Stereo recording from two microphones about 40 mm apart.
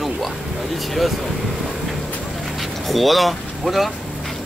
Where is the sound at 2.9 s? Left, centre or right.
Centre.